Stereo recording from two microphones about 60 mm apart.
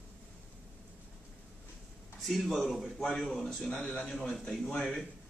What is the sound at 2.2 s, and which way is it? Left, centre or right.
Speech, centre.